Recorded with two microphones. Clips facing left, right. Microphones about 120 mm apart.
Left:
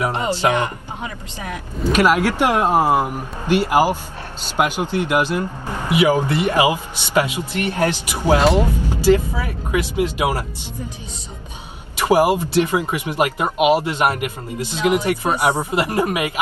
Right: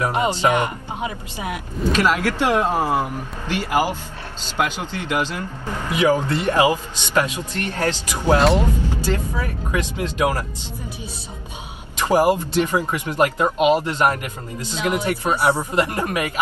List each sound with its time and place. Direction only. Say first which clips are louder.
0.1 s speech: even; 20° right (ahead or behind)
1.9 s speech: left 3 dB; 15° left (ahead or behind)
12.0 s speech: left 2 dB; 15° left (ahead or behind)